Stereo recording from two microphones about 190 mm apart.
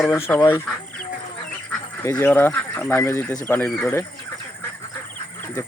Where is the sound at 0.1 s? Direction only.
10° left (ahead or behind).